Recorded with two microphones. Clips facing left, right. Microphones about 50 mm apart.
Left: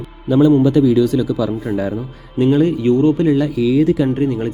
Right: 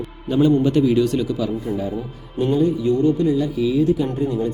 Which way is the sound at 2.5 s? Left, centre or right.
Left.